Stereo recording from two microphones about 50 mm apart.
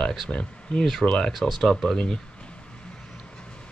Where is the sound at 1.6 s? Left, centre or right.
Centre.